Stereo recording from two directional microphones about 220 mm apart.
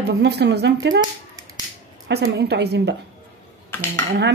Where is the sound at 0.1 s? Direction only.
50° right (ahead or behind).